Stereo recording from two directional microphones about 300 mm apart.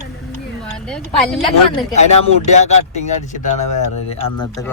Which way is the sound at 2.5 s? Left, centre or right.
Left.